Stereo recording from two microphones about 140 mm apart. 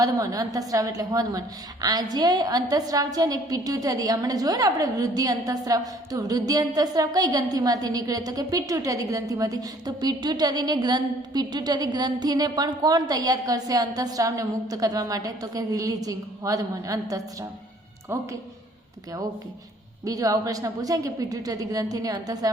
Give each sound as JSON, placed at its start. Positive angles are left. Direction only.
{"t": 0.0, "sound": "a woman's voice", "side_deg": -25}
{"t": 20.1, "sound": "a woman's voice", "side_deg": -25}